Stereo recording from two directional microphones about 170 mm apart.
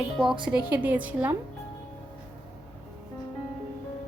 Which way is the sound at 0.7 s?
10° right (ahead or behind).